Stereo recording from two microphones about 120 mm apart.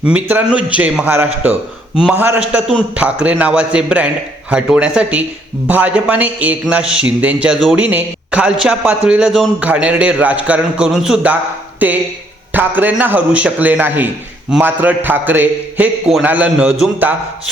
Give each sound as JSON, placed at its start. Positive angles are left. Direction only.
{"t": 0.0, "sound": "a man's voice", "side_deg": -10}